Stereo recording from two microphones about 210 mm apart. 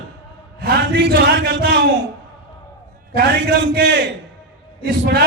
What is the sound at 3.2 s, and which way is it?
Speech, 50° right (ahead or behind).